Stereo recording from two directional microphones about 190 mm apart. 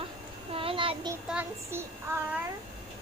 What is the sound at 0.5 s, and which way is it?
Speech, 30° right (ahead or behind).